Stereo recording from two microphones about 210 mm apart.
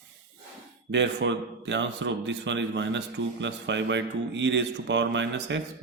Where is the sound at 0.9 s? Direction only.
60° right (ahead or behind).